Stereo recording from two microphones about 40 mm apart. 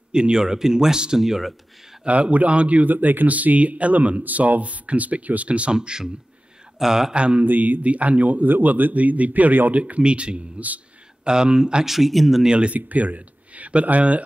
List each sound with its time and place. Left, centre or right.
0.1 s speech: centre
0.4 s speech: centre
2.0 s a man's voice: right
2.9 s a man's voice: right
5.8 s speech: centre
7.2 s mantra: right
7.4 s a man's voice: right; by 12.4 s centre
12.4 s mantra: right
12.7 s speech: right